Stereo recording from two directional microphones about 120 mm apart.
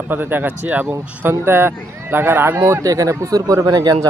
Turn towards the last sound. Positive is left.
turn(degrees=-30)  # may be behind; listen again after turning